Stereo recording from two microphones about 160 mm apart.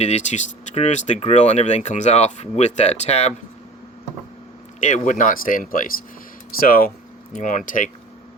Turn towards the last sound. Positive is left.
turn(degrees=55)  # may be behind; listen again after turning